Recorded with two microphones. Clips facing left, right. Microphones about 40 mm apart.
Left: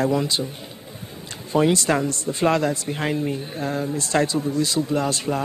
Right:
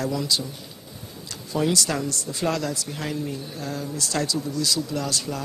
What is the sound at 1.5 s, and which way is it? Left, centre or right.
Speech, left.